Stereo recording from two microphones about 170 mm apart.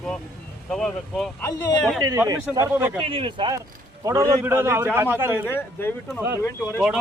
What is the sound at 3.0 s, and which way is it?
Speech, 30° right (ahead or behind).